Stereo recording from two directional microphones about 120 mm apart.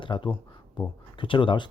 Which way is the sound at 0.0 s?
45° left (ahead or behind).